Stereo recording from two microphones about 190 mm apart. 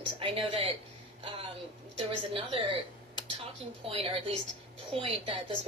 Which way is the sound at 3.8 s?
30° right (ahead or behind).